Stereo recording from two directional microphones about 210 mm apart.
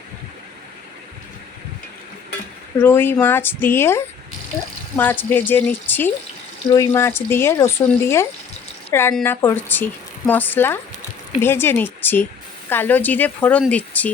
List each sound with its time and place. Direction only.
2.8 s a woman's voice: 10° left (ahead or behind)